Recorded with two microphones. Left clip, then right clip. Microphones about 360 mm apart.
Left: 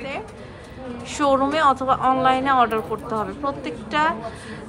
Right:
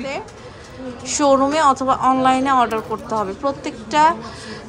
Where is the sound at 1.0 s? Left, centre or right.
Centre.